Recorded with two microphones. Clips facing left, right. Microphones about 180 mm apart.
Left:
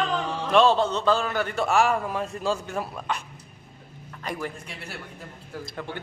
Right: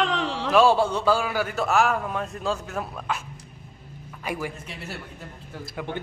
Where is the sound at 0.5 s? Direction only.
10° right (ahead or behind).